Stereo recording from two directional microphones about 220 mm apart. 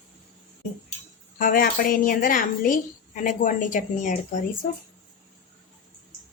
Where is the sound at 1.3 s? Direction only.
40° left (ahead or behind).